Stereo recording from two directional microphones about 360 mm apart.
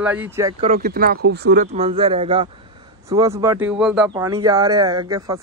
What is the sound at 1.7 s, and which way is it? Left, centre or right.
Speech, centre.